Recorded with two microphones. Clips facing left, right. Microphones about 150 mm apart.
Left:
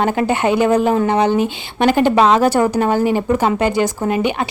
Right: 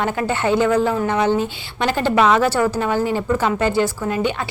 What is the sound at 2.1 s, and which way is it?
Speech, 30° left (ahead or behind).